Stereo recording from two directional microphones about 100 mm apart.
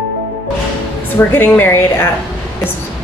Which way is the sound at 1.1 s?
20° left (ahead or behind).